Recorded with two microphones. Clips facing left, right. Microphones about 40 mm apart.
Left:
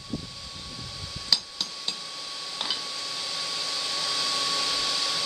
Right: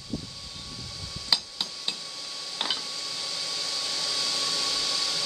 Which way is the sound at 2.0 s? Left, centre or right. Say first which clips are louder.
Left 2 dB; centre.